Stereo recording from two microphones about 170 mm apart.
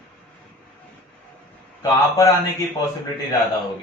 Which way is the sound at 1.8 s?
20° left (ahead or behind).